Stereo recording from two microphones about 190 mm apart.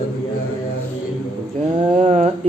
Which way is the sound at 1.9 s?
35° right (ahead or behind).